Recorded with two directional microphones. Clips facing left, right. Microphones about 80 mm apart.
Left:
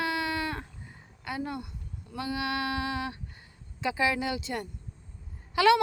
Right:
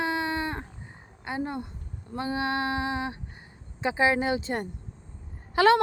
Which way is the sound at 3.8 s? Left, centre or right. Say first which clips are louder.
Right 4 dB; right.